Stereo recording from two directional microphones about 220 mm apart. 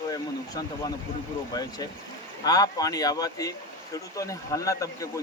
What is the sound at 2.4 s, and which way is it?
A man's voice, 15° left (ahead or behind).